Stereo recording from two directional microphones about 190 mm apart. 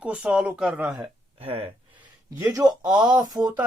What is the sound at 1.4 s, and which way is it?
Speech, 30° right (ahead or behind).